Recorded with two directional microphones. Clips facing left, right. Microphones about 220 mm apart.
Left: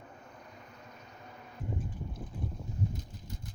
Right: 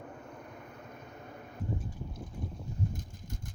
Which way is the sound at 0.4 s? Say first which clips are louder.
Right 4 dB; 55° right (ahead or behind).